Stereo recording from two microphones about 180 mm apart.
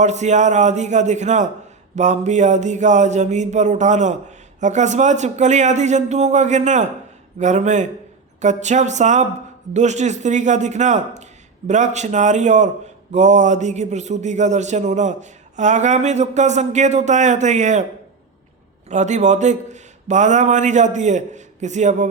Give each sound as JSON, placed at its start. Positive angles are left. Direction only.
{"t": 0.0, "sound": "a man's voice", "side_deg": -40}
{"t": 18.9, "sound": "a man's voice", "side_deg": -40}